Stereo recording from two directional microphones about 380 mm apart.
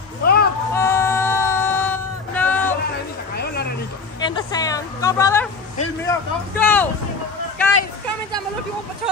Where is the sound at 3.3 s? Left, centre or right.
Left.